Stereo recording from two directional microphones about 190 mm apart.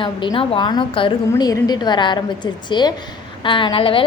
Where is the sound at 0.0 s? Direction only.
25° left (ahead or behind).